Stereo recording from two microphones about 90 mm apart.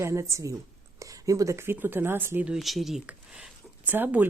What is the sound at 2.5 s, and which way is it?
Speech, centre (ahead or behind).